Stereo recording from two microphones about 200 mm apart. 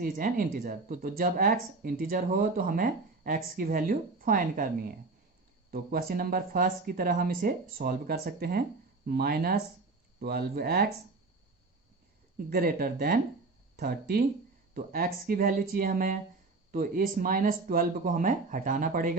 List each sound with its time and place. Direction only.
0.0 s speech: 45° right (ahead or behind)
5.7 s speech: 50° right (ahead or behind)
12.5 s speech: 50° right (ahead or behind)